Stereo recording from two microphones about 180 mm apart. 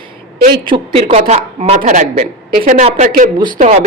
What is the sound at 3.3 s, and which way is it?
Speech, 25° right (ahead or behind).